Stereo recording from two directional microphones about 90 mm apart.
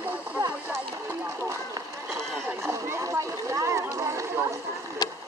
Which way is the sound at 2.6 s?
30° right (ahead or behind).